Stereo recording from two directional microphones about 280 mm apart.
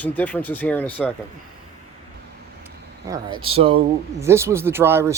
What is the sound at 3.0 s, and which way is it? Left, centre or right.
Speech, centre.